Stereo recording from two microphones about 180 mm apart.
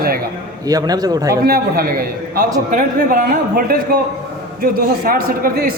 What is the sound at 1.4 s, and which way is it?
A man's voice, 55° right (ahead or behind).